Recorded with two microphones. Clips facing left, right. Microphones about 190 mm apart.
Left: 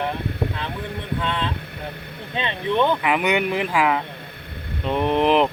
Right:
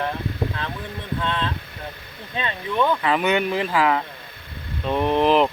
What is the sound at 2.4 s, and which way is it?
Speech, 25° left (ahead or behind).